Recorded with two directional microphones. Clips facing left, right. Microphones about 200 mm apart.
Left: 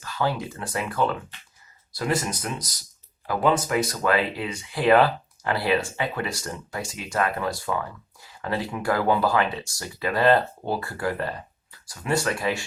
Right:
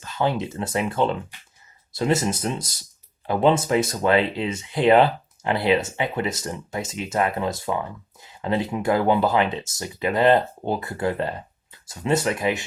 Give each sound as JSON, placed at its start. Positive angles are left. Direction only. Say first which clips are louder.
{"t": 0.0, "sound": "speech", "louder": "right 3 dB", "side_deg": -20}
{"t": 1.3, "sound": "a sound", "louder": "even", "side_deg": -15}
{"t": 1.9, "sound": "speech", "louder": "right 4 dB", "side_deg": -25}